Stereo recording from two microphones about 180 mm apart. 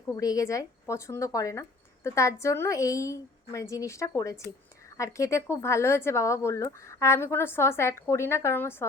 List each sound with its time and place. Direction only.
0.2 s speech: 20° left (ahead or behind)